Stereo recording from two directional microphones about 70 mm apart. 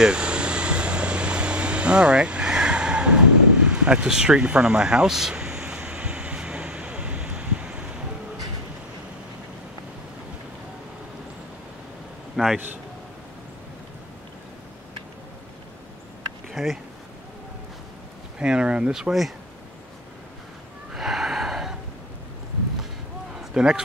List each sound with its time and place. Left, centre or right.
0.0 s air conditioning: centre
12.4 s a man's voice: centre
16.5 s speech: centre
18.4 s speech: centre
20.9 s gasp: centre
23.5 s a man's voice: centre